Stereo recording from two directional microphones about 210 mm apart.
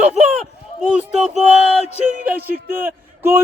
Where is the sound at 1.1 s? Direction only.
5° right (ahead or behind).